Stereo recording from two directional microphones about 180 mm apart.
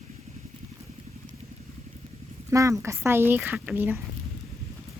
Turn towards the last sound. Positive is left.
turn(degrees=-10)  # may be behind; listen again after turning